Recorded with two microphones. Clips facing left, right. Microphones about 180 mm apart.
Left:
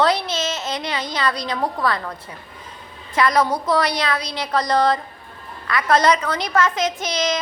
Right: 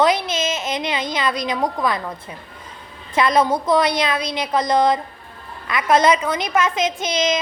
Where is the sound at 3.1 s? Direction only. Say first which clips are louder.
Right 1 dB; 25° right (ahead or behind).